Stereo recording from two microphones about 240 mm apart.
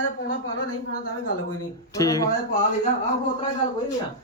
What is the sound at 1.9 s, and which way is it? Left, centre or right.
Speech, centre.